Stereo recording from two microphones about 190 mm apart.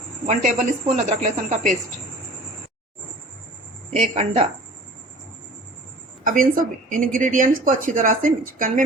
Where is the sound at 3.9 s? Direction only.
35° right (ahead or behind).